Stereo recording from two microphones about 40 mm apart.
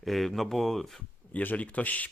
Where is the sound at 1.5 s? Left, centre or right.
Left.